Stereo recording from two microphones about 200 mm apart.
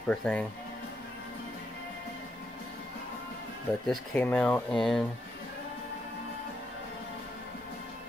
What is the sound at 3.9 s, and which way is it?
Speech, 5° left (ahead or behind).